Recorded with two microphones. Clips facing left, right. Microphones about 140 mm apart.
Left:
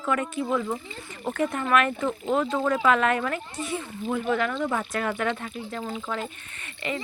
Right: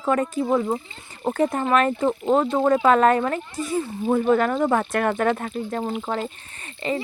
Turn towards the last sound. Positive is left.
turn(degrees=-30)  # may be behind; listen again after turning